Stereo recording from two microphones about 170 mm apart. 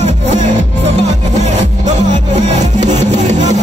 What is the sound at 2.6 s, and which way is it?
Music, 45° right (ahead or behind).